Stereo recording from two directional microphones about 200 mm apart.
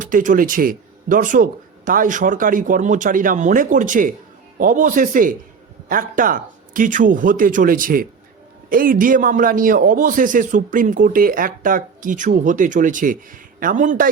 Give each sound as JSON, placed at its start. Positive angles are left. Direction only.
{"t": 0.0, "sound": "a man's voice", "side_deg": -40}